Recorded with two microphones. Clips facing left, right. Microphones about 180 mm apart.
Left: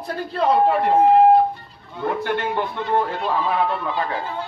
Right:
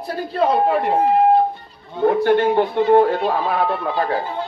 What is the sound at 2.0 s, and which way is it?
A man's voice, 40° right (ahead or behind).